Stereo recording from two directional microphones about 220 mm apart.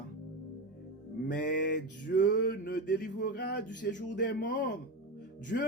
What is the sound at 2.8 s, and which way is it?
Speech, 40° left (ahead or behind).